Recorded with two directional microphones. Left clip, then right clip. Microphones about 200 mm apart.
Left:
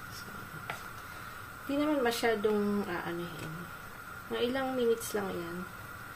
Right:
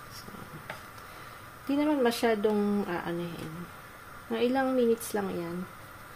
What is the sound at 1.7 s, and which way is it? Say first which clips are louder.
A woman's voice: right 3 dB; 40° right (ahead or behind).